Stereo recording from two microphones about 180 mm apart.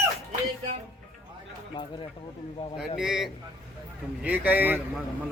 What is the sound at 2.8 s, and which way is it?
A man's voice, 5° right (ahead or behind).